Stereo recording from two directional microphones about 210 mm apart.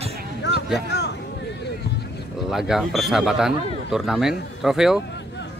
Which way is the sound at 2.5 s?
Centre (ahead or behind).